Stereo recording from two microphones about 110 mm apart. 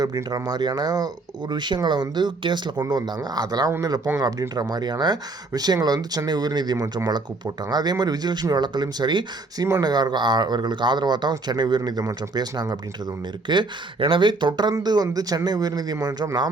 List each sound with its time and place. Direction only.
0.0 s speech: 35° right (ahead or behind)